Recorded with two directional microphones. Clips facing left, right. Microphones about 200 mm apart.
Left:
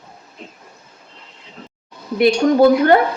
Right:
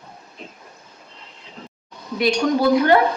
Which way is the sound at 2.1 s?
55° left (ahead or behind).